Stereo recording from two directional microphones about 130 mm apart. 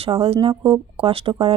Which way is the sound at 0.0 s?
45° right (ahead or behind).